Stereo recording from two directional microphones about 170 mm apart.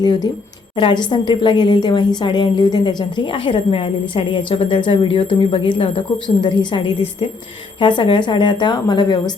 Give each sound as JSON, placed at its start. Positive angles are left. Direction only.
{"t": 0.0, "sound": "a woman's voice", "side_deg": 25}